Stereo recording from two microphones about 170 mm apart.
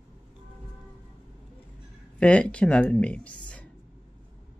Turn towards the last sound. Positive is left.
turn(degrees=10)  # may be behind; listen again after turning